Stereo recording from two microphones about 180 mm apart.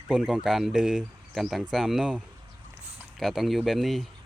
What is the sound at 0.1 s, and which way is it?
Speech, 5° right (ahead or behind).